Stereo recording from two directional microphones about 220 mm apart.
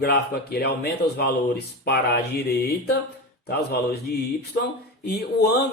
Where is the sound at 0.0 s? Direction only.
45° left (ahead or behind).